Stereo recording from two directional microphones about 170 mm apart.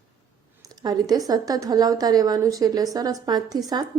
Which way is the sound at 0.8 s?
25° right (ahead or behind).